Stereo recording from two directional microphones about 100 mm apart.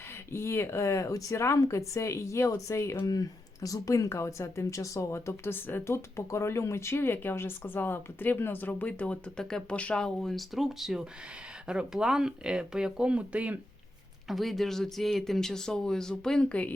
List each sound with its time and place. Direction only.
0.3 s speech: 25° left (ahead or behind); by 13.6 s 15° right (ahead or behind)
14.3 s speech: centre (ahead or behind)